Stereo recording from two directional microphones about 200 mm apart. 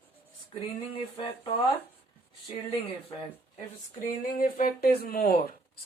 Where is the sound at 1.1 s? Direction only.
25° left (ahead or behind).